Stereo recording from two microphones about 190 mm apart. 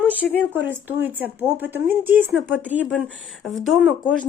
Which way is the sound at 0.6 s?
10° right (ahead or behind).